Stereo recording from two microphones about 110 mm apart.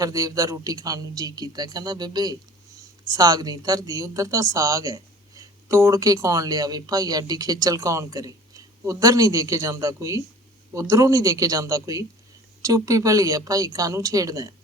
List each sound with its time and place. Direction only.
0.0 s speech: 30° right (ahead or behind)